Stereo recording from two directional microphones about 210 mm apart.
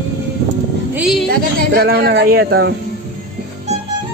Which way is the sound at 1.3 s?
50° right (ahead or behind).